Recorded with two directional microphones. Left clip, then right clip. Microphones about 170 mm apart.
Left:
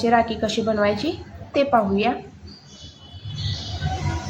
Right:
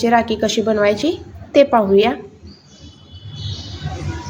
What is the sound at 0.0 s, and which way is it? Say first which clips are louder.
A woman's voice: right 4 dB; 45° right (ahead or behind).